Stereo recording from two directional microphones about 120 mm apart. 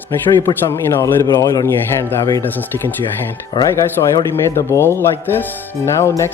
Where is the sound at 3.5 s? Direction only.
40° left (ahead or behind); by 5.4 s 20° left (ahead or behind).